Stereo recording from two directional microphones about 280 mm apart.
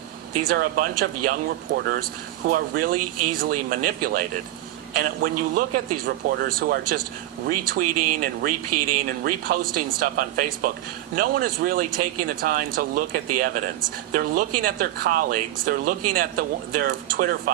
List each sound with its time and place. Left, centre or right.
0.4 s speech: right
3.0 s speech: right
3.3 s speech: right
7.9 s speech: right
8.2 s speech: right
8.7 s speech: right
9.4 s speech: right